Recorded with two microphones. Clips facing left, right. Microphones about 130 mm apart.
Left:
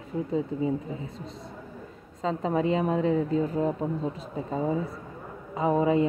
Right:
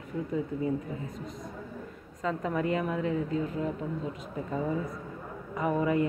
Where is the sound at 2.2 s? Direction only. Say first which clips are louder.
Left 4 dB; 25° left (ahead or behind).